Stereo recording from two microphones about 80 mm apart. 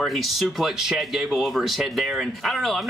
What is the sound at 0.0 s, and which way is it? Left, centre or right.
Speech, centre.